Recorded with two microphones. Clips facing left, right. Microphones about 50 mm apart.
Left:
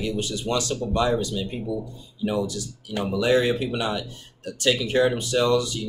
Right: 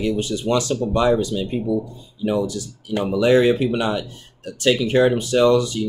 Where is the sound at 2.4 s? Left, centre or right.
Right.